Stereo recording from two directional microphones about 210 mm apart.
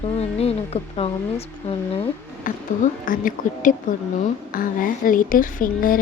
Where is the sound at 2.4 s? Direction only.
40° left (ahead or behind).